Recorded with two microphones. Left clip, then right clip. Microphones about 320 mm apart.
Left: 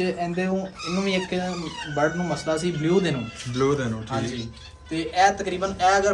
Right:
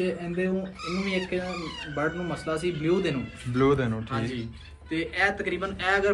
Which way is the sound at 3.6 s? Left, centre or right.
Centre.